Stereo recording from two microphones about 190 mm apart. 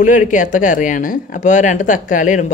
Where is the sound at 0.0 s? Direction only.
40° left (ahead or behind).